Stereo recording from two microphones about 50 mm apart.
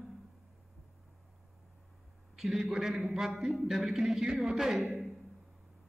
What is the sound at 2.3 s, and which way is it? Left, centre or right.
A man's voice, centre.